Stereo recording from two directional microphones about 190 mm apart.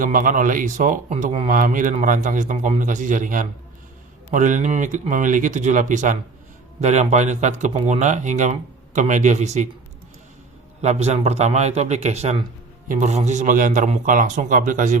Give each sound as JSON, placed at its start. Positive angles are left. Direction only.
{"t": 0.0, "sound": "a man's voice", "side_deg": -45}
{"t": 10.8, "sound": "a man's voice", "side_deg": -35}